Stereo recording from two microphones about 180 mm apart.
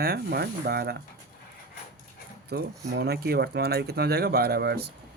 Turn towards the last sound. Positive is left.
turn(degrees=-65)  # may be behind; listen again after turning